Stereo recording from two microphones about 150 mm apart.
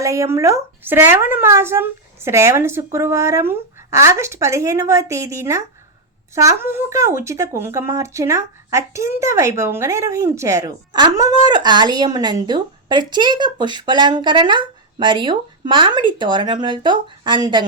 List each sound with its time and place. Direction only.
0.0 s a woman's voice: 20° right (ahead or behind)